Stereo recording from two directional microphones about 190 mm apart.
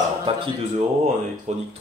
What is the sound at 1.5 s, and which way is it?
Speech, 35° right (ahead or behind).